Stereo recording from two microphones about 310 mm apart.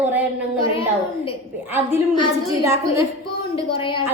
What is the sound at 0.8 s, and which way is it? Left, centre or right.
Speech, centre.